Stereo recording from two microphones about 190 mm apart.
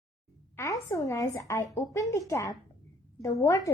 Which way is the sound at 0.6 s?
15° left (ahead or behind).